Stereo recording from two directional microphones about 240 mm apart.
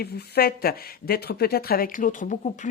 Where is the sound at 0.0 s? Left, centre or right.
Left.